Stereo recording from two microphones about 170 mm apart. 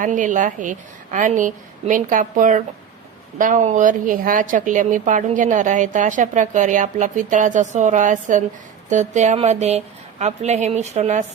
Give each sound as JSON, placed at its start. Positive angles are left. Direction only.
{"t": 0.0, "sound": "a woman's voice", "side_deg": -50}